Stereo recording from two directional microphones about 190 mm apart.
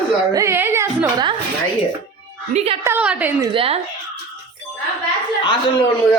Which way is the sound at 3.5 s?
30° right (ahead or behind).